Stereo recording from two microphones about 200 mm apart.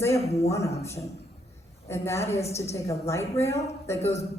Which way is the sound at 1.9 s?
15° left (ahead or behind).